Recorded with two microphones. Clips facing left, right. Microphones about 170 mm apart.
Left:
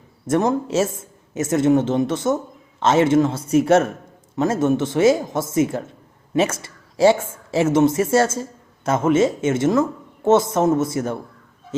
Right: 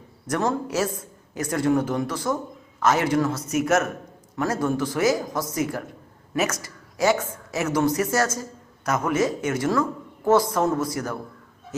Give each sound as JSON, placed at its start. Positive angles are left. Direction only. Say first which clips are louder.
{"t": 0.3, "sound": "speech", "louder": "left 5 dB", "side_deg": 25}